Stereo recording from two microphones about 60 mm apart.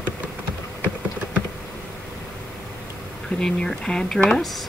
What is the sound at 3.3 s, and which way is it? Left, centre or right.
Speech, centre.